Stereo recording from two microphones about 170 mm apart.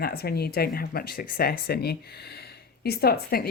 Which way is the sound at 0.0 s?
65° left (ahead or behind).